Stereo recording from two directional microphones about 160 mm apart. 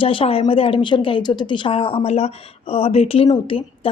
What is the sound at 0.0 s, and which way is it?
A woman's voice, 35° left (ahead or behind).